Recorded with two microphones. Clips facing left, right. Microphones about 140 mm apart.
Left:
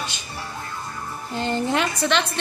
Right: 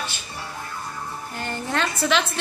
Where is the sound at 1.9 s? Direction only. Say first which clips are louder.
Even; centre (ahead or behind).